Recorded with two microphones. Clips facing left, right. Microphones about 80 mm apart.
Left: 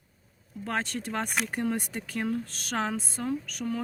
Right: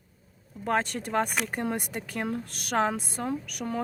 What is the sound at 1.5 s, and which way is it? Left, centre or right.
Speech, centre.